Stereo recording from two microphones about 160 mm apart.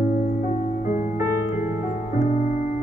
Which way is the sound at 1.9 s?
45° left (ahead or behind).